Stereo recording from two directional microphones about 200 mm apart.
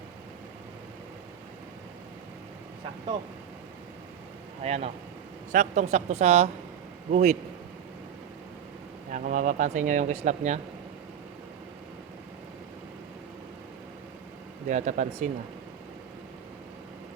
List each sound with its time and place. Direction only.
4.6 s speech: 30° right (ahead or behind)
9.1 s speech: 40° right (ahead or behind)
14.7 s speech: 35° right (ahead or behind)